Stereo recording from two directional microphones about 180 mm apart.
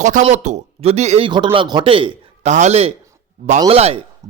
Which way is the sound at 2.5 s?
40° right (ahead or behind).